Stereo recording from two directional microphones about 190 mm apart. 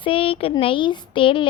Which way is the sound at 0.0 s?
30° left (ahead or behind).